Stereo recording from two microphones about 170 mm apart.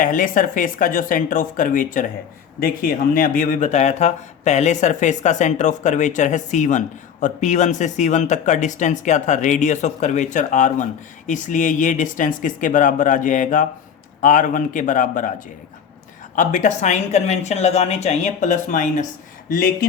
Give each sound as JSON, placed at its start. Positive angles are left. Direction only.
{"t": 0.0, "sound": "speech", "side_deg": 50}
{"t": 16.3, "sound": "speech", "side_deg": 50}
{"t": 19.5, "sound": "speech", "side_deg": 60}